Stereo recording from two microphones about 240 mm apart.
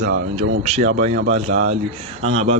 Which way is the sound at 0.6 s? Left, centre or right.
Right.